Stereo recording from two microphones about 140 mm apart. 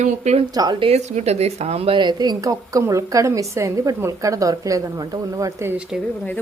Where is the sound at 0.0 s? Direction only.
50° right (ahead or behind).